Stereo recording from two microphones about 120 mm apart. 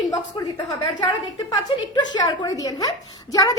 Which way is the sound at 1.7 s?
35° left (ahead or behind).